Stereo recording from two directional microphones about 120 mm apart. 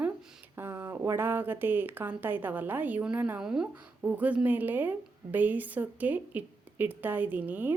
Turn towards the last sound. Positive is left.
turn(degrees=-15)  # may be behind; listen again after turning